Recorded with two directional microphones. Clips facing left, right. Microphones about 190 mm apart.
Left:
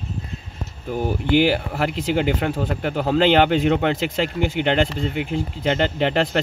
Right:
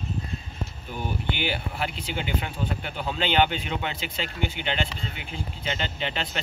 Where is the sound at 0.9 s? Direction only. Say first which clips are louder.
Left 13 dB; 90° left.